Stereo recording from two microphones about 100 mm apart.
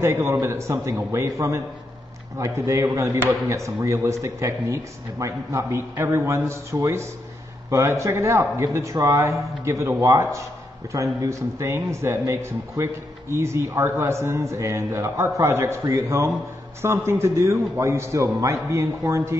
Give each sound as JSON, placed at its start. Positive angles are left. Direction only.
{"t": 0.0, "sound": "a man's voice", "side_deg": -25}